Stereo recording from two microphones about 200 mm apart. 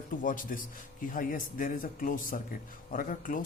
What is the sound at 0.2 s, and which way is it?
Speech, 40° left (ahead or behind).